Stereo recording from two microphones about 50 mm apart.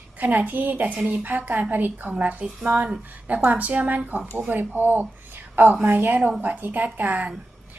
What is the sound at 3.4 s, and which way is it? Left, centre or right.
A woman's voice, right.